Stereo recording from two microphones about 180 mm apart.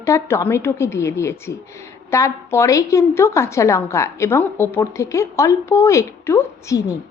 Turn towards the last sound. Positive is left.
turn(degrees=15)  # may be behind; listen again after turning